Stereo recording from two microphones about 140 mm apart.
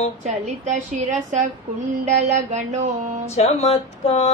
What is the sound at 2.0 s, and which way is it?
Female singing, 55° right (ahead or behind).